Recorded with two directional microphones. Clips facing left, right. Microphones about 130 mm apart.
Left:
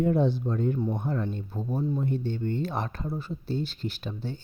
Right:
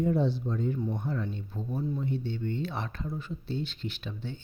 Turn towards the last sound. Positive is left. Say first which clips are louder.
# left 4 dB
turn(degrees=40)  # may be behind; listen again after turning